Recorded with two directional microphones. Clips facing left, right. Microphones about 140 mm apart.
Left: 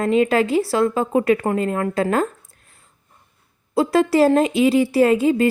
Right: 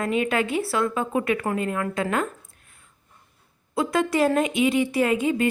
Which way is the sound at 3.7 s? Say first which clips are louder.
Left 6 dB; 30° left (ahead or behind).